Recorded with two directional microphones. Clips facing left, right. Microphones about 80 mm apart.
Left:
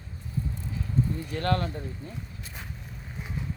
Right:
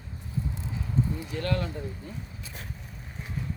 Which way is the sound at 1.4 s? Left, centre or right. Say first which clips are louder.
Left 3 dB; left.